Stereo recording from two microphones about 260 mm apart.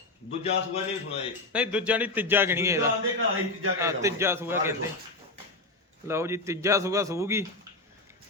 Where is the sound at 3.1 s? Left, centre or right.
Right.